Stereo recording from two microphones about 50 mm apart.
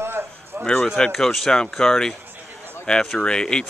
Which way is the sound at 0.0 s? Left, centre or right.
Right.